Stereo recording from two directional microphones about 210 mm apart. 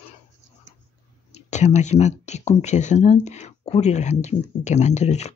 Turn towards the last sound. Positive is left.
turn(degrees=30)  # may be behind; listen again after turning